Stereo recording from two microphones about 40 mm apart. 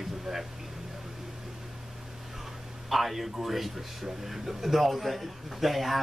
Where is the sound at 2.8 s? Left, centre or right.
Centre.